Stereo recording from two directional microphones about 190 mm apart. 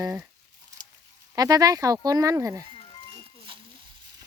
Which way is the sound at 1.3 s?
20° right (ahead or behind).